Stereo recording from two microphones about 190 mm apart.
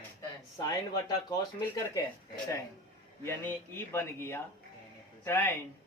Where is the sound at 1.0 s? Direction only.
20° left (ahead or behind).